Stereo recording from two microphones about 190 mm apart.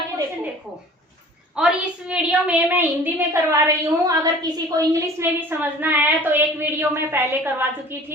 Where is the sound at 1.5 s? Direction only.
5° right (ahead or behind).